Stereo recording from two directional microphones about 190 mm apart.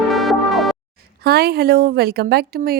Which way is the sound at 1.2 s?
55° right (ahead or behind).